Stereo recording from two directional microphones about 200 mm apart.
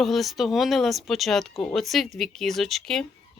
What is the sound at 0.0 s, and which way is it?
Speech, centre (ahead or behind).